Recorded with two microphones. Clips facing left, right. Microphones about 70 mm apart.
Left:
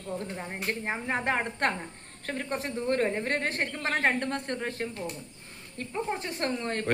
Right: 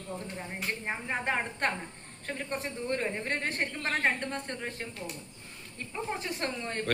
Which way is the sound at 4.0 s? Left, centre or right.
Left.